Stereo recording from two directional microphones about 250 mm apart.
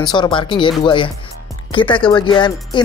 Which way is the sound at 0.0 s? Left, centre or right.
Centre.